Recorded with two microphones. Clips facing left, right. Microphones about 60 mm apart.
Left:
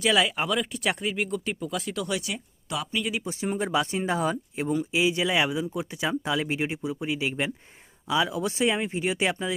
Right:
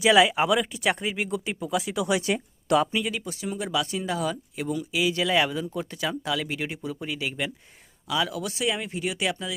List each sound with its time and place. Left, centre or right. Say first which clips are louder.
0.0 s speech: right 5 dB; centre
2.3 s speech: right 10 dB; right
3.2 s speech: left 3 dB; left